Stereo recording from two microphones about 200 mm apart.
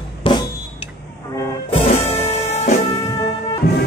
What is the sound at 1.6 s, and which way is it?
Music, 30° left (ahead or behind).